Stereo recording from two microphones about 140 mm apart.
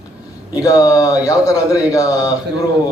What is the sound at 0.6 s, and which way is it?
A man's voice, 25° left (ahead or behind).